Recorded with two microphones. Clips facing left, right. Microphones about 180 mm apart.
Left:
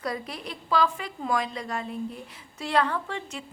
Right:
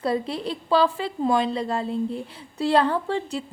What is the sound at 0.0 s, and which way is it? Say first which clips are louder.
A woman's voice: right 8 dB; 30° right (ahead or behind).